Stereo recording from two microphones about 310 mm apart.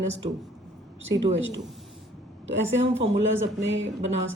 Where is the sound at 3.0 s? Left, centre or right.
Right.